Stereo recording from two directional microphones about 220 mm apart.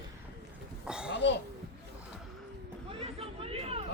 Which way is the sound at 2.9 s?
25° right (ahead or behind).